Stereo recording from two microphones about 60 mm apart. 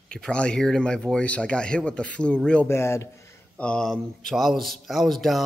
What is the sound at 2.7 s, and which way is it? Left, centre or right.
Speech, left.